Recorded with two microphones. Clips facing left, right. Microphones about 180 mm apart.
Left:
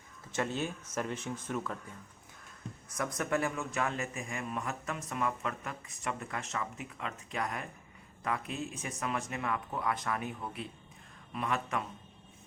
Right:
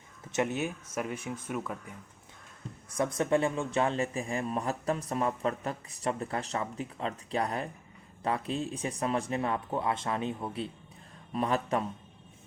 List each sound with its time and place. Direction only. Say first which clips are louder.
0.3 s speech: right 4 dB; 20° right (ahead or behind)
2.9 s a man's voice: right 6 dB; 25° right (ahead or behind)